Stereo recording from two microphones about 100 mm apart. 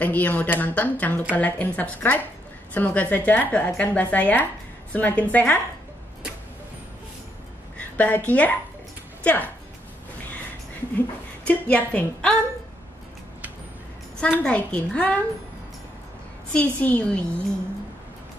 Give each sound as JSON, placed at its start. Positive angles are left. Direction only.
{"t": 0.0, "sound": "speech", "side_deg": 15}
{"t": 7.7, "sound": "a woman's voice", "side_deg": 15}
{"t": 11.4, "sound": "speech", "side_deg": 15}
{"t": 14.2, "sound": "speech", "side_deg": 15}
{"t": 16.5, "sound": "speech", "side_deg": 15}